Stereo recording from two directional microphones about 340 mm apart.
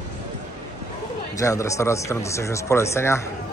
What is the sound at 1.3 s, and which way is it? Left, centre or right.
Speech, centre.